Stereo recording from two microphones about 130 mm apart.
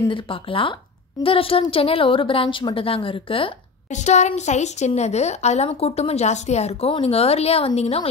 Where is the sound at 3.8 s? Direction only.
65° left (ahead or behind).